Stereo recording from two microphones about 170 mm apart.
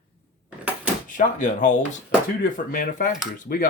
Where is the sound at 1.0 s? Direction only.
50° left (ahead or behind).